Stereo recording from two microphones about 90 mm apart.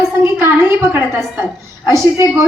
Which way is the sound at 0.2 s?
25° right (ahead or behind).